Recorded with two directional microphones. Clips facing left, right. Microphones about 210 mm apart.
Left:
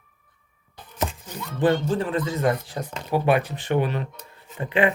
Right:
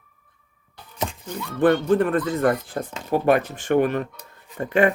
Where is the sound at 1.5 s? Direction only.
60° right (ahead or behind).